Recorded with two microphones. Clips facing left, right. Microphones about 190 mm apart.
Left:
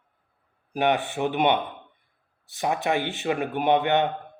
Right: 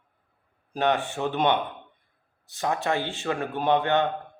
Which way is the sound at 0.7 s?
15° left (ahead or behind).